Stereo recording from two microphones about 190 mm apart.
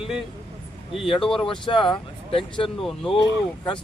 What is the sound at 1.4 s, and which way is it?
Speech, 25° left (ahead or behind).